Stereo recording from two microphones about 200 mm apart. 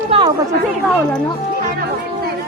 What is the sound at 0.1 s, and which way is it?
Chatter, 25° right (ahead or behind).